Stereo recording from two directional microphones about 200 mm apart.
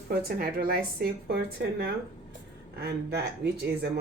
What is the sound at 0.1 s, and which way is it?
A woman's voice, 50° right (ahead or behind).